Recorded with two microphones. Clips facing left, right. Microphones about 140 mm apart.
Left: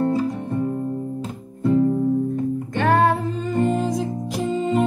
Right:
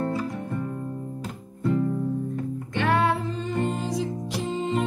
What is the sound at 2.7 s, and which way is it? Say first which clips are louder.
Music: left 4 dB; 45° left (ahead or behind).